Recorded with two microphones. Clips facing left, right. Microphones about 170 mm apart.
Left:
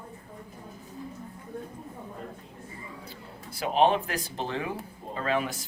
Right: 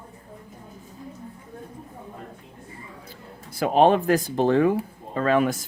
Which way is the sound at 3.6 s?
50° right (ahead or behind).